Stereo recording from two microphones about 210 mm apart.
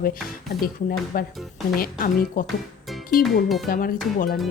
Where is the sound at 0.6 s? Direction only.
45° left (ahead or behind).